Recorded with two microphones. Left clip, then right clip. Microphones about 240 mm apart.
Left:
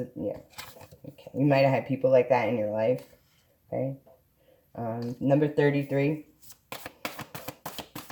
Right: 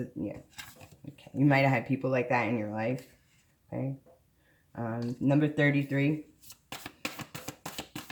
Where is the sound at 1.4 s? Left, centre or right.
Centre.